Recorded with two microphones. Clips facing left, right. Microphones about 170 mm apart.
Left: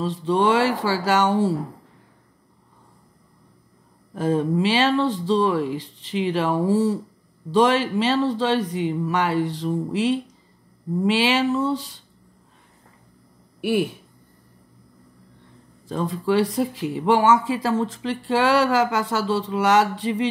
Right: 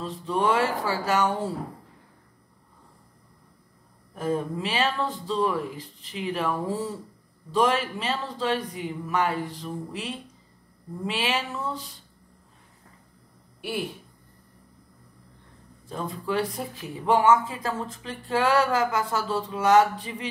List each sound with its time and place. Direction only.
0.0 s speech: 80° left
4.1 s speech: 90° left
15.9 s speech: 85° left